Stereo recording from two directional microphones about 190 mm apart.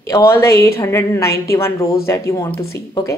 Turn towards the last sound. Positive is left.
turn(degrees=15)  # may be behind; listen again after turning